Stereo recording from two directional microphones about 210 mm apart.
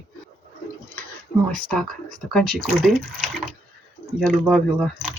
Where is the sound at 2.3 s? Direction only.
Centre (ahead or behind).